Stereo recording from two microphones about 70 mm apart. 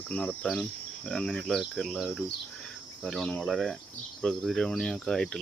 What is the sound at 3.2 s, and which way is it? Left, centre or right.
Cricket, centre.